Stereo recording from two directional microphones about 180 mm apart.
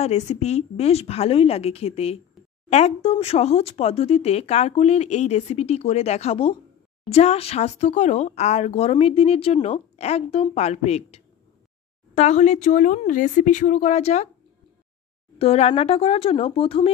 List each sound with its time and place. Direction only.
0.0 s speech: 40° left (ahead or behind)
15.3 s speech: 35° left (ahead or behind)